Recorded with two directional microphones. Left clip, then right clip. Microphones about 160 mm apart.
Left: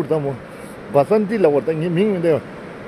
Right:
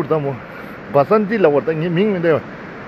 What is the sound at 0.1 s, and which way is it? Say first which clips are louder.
Speech: right 2 dB; 15° left (ahead or behind).